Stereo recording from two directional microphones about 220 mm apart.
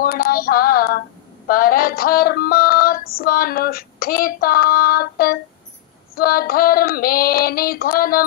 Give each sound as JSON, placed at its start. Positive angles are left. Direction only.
{"t": 0.0, "sound": "synthetic singing", "side_deg": 40}